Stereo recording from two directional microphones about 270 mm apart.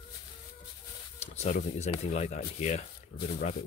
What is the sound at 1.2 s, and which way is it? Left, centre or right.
Speech, left.